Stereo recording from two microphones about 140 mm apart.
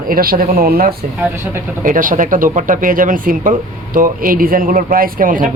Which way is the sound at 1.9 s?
70° right (ahead or behind).